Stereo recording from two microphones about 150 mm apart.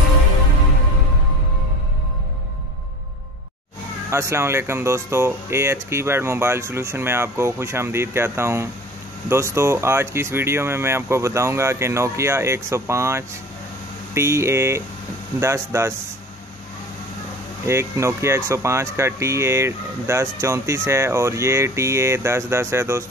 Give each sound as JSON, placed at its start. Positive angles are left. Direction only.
{"t": 4.1, "sound": "speech", "side_deg": -20}
{"t": 17.6, "sound": "speech", "side_deg": -20}